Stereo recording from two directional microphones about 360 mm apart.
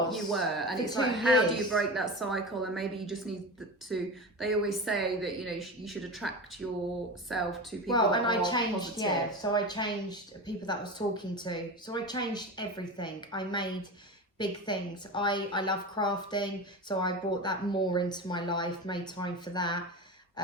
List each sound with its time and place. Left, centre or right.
0.1 s a woman's voice: centre
7.9 s a woman's voice: centre